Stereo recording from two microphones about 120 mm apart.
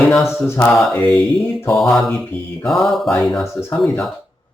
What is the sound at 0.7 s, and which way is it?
Speech, centre (ahead or behind).